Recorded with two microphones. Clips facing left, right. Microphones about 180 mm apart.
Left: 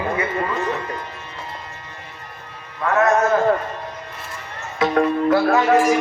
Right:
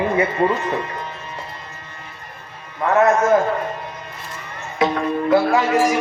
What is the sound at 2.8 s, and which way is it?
Speech, 20° right (ahead or behind).